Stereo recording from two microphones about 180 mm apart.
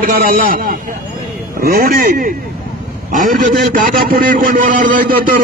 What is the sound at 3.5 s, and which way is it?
A man's voice, 55° right (ahead or behind).